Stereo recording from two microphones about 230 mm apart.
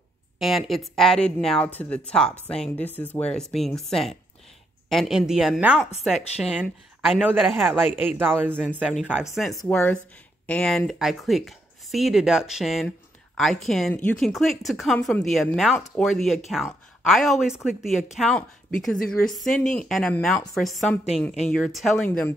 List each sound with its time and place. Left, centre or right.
0.4 s a woman's voice: centre